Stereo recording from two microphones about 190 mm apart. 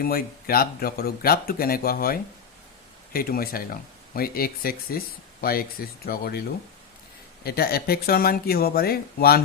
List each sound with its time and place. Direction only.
0.0 s speech: 50° left (ahead or behind)
7.4 s speech: 55° left (ahead or behind)